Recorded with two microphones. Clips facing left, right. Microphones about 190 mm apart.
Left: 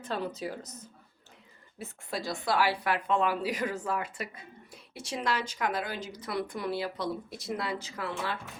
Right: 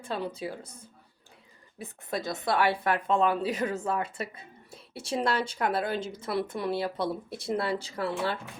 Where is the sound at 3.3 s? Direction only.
25° right (ahead or behind).